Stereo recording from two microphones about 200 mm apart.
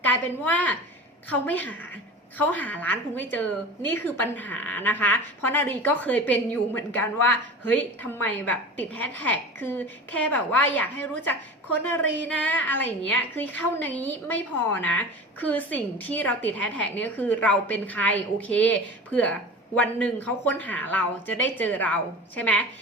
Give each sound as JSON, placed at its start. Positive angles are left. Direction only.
{"t": 0.0, "sound": "a woman's voice", "side_deg": 10}